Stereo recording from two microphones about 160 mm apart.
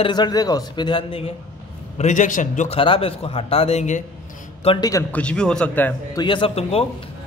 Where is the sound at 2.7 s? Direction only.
35° left (ahead or behind).